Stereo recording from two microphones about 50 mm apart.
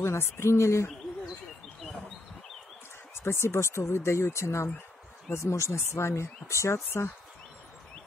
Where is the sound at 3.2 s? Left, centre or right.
Left.